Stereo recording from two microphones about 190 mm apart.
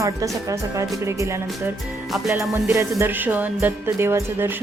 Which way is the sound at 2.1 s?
Centre (ahead or behind).